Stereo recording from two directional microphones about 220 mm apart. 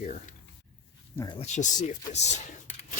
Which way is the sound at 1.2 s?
20° left (ahead or behind).